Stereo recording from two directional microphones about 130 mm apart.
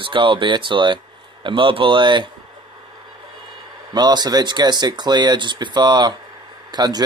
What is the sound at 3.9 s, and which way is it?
Speech, 30° right (ahead or behind).